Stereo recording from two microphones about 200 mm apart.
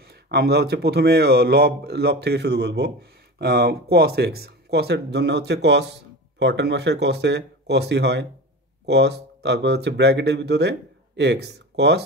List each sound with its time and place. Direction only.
0.0 s a man's voice: 55° right (ahead or behind)